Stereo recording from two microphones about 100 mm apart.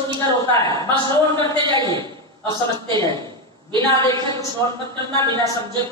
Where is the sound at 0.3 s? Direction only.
50° right (ahead or behind).